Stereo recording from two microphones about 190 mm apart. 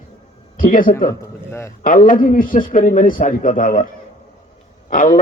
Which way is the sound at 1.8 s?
45° left (ahead or behind).